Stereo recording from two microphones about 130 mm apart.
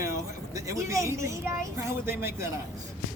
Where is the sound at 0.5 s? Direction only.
25° right (ahead or behind).